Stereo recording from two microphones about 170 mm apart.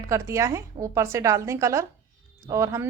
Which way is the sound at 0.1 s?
15° right (ahead or behind).